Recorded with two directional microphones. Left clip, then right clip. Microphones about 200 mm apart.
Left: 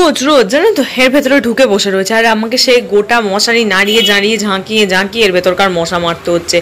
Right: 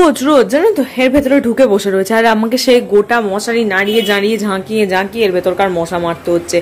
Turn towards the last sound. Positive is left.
turn(degrees=-15)  # may be behind; listen again after turning